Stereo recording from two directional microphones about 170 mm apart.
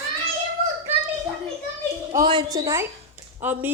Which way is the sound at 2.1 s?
30° right (ahead or behind).